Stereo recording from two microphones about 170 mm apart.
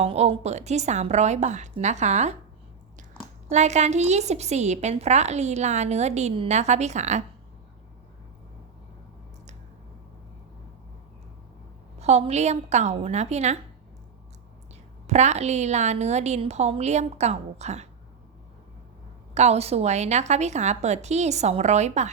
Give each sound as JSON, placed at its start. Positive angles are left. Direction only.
{"t": 0.0, "sound": "a woman's voice", "side_deg": -35}
{"t": 3.5, "sound": "a woman's voice", "side_deg": -45}
{"t": 11.9, "sound": "a woman's voice", "side_deg": -40}
{"t": 15.0, "sound": "a woman's voice", "side_deg": -40}
{"t": 19.3, "sound": "a woman's voice", "side_deg": -40}